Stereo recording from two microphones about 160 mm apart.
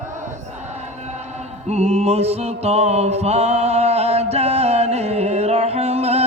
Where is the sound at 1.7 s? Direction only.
40° right (ahead or behind).